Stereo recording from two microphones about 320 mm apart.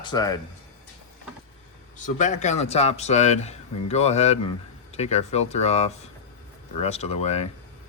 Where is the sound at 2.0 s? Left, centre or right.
Left.